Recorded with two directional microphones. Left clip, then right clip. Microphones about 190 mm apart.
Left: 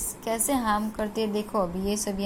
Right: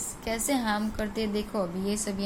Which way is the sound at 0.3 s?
10° left (ahead or behind).